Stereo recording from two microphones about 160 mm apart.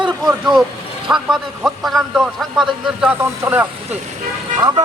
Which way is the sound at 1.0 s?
5° right (ahead or behind).